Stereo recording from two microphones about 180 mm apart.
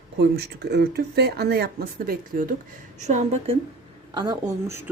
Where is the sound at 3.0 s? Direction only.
40° right (ahead or behind).